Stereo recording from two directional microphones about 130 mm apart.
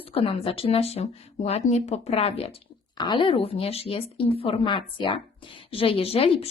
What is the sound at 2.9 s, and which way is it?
A woman's voice, 35° left (ahead or behind).